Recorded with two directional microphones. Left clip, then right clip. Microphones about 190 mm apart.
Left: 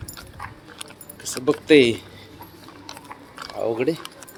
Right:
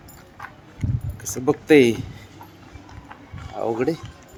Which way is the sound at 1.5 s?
15° right (ahead or behind).